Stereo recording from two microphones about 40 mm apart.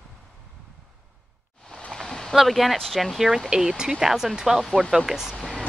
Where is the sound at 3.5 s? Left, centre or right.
Centre.